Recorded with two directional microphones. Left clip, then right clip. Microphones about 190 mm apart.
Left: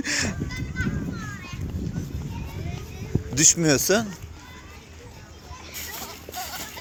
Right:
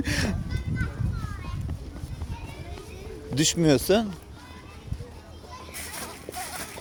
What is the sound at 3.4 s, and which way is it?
Speech, 10° right (ahead or behind).